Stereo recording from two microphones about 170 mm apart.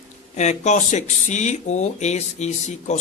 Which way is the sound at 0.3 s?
45° left (ahead or behind).